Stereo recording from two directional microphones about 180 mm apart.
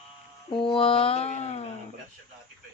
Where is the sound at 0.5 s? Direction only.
30° left (ahead or behind).